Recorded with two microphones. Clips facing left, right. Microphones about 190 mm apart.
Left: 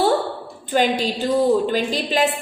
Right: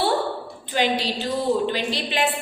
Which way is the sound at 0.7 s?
45° left (ahead or behind).